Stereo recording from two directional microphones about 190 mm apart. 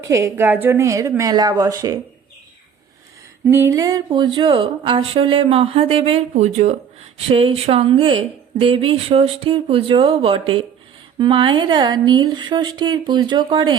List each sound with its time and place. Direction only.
0.1 s a woman's voice: 15° right (ahead or behind)
3.4 s speech: 10° right (ahead or behind)